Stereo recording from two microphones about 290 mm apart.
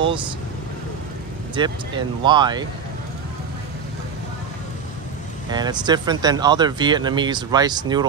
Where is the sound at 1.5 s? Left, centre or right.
Centre.